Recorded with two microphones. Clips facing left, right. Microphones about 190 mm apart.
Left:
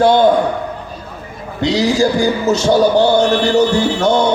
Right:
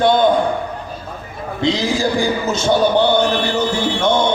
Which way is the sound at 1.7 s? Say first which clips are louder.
Left 4 dB; 40° left (ahead or behind).